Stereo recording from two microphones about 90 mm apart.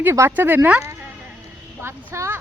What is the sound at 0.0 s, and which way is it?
Speech, 25° right (ahead or behind).